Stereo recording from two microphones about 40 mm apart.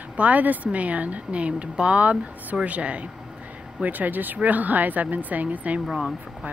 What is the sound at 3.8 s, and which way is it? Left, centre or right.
A woman's voice, right.